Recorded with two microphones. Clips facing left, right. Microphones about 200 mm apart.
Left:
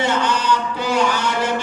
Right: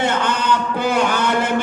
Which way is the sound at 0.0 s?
55° right (ahead or behind).